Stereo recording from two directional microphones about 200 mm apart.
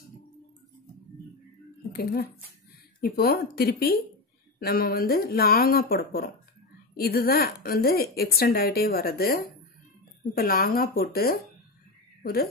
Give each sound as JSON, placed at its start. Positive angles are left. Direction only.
{"t": 1.9, "sound": "a woman's voice", "side_deg": 50}